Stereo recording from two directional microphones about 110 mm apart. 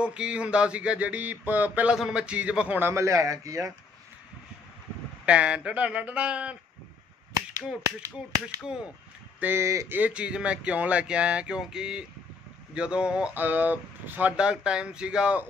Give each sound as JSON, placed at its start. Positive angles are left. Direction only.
{"t": 0.0, "sound": "speech", "side_deg": -10}
{"t": 2.9, "sound": "a man's voice", "side_deg": -25}
{"t": 5.2, "sound": "speech", "side_deg": -10}
{"t": 9.4, "sound": "a man's voice", "side_deg": -20}
{"t": 9.9, "sound": "speech", "side_deg": -10}